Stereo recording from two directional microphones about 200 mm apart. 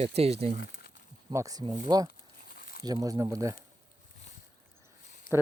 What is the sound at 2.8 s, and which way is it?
Speech, 20° right (ahead or behind).